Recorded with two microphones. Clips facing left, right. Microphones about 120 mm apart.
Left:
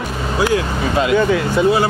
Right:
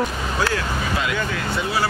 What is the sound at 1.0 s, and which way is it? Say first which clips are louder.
Speech: left 10 dB; 30° left (ahead or behind).